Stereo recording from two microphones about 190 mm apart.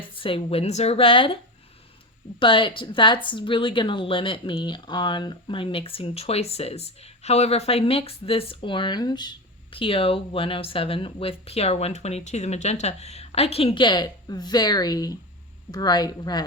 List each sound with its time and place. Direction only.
0.1 s speech: 25° left (ahead or behind)
2.4 s speech: 25° left (ahead or behind)